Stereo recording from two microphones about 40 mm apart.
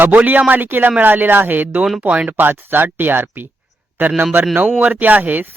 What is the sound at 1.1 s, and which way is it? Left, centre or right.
Speech, right.